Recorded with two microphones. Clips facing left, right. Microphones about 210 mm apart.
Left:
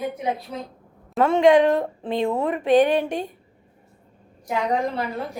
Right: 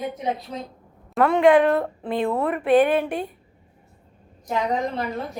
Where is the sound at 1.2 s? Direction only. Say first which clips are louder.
Even; 25° left (ahead or behind).